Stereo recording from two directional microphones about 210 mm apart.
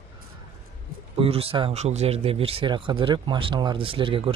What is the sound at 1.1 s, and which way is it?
Speech, 25° right (ahead or behind).